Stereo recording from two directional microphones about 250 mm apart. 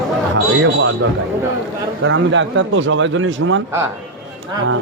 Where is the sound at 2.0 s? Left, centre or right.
Right.